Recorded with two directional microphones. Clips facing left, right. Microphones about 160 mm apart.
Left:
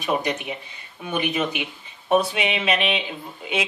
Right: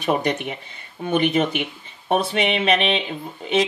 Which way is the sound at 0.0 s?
50° right (ahead or behind).